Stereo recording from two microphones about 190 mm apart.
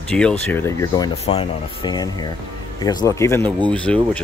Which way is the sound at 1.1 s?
30° left (ahead or behind).